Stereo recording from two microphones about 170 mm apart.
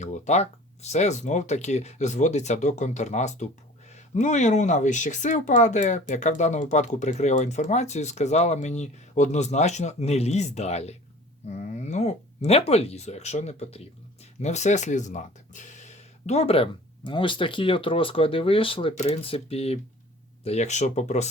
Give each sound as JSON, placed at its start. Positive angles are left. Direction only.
{"t": 0.0, "sound": "speech", "side_deg": 45}